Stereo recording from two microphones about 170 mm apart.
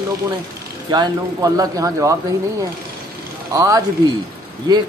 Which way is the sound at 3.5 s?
20° right (ahead or behind).